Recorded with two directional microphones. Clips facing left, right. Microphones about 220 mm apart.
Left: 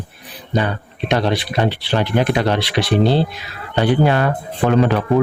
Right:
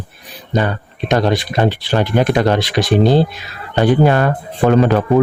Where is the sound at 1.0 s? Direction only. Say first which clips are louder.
Right 3 dB; 45° right (ahead or behind).